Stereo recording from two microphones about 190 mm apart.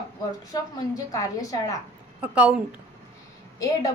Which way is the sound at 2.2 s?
10° right (ahead or behind).